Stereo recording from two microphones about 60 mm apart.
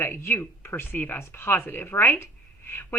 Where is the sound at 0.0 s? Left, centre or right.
Left.